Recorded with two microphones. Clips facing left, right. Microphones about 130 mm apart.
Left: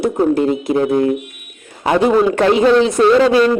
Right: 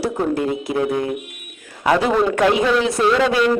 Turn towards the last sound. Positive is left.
turn(degrees=25)  # may be behind; listen again after turning